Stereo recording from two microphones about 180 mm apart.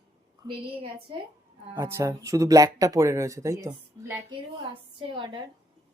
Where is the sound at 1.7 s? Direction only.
15° right (ahead or behind).